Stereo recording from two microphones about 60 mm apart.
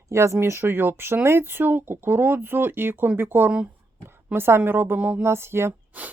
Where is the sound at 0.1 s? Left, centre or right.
Right.